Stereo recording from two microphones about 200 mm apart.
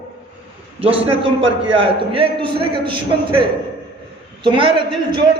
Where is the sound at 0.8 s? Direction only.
30° right (ahead or behind).